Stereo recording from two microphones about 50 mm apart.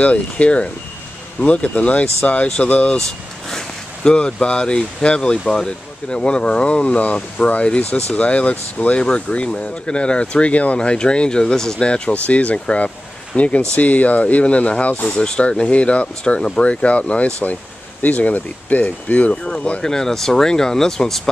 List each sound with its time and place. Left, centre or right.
0.0 s speech: left
3.0 s speech: centre; by 19.8 s left
19.8 s speech: centre